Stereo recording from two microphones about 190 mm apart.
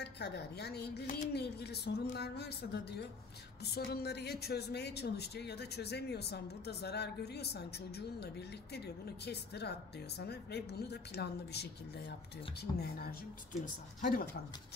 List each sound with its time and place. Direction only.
0.0 s speech: 60° left (ahead or behind)